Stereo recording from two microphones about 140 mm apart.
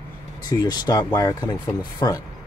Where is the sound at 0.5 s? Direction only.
30° left (ahead or behind).